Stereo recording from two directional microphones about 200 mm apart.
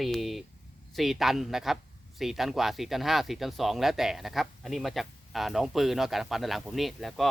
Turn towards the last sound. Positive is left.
turn(degrees=0)  # may be behind; listen again after turning